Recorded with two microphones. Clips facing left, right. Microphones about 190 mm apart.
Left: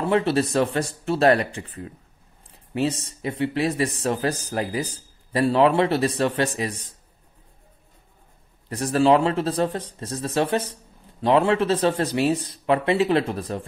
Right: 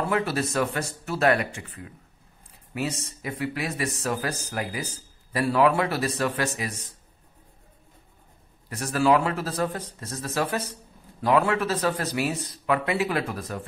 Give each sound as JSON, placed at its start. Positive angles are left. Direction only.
{"t": 0.1, "sound": "speech", "side_deg": 30}
{"t": 8.6, "sound": "speech", "side_deg": 30}